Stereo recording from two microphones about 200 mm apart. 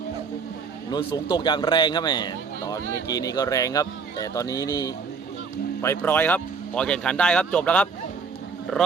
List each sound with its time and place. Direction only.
0.9 s a man's voice: 20° left (ahead or behind)